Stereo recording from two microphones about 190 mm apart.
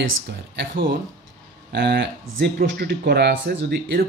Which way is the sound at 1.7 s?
60° right (ahead or behind).